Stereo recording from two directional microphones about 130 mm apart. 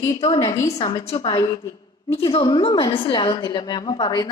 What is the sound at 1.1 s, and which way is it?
A woman's voice, 40° left (ahead or behind).